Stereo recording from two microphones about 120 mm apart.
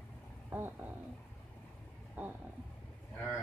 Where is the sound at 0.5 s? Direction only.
15° right (ahead or behind).